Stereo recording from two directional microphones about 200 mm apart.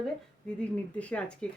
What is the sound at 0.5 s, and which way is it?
Speech, 5° left (ahead or behind).